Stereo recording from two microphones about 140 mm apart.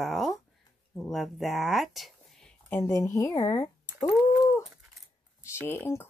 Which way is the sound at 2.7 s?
25° left (ahead or behind).